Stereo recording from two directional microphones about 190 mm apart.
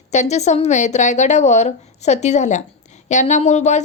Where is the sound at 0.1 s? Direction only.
35° left (ahead or behind).